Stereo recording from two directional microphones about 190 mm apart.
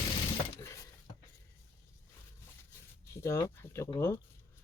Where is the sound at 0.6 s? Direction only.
15° left (ahead or behind).